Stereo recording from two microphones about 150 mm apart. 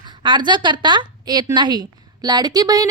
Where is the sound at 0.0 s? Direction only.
30° right (ahead or behind).